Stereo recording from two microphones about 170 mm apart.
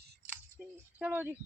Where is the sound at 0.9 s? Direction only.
10° right (ahead or behind).